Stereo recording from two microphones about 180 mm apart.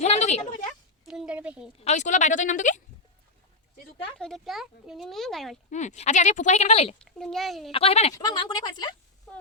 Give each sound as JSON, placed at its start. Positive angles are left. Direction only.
{"t": 0.0, "sound": "a woman's voice", "side_deg": 35}
{"t": 1.0, "sound": "a sound", "side_deg": -5}
{"t": 1.8, "sound": "speech", "side_deg": 40}
{"t": 4.2, "sound": "speech", "side_deg": 0}
{"t": 5.7, "sound": "speech", "side_deg": 40}
{"t": 7.0, "sound": "speech", "side_deg": 5}
{"t": 7.7, "sound": "speech", "side_deg": 35}
{"t": 8.1, "sound": "speech", "side_deg": 20}